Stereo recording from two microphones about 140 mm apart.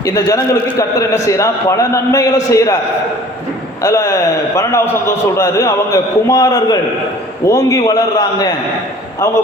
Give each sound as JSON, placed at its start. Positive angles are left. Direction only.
{"t": 0.0, "sound": "a man's voice", "side_deg": 20}
{"t": 3.8, "sound": "a man's voice", "side_deg": 25}